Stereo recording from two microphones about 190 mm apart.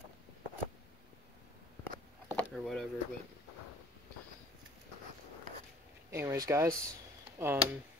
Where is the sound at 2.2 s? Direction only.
5° left (ahead or behind).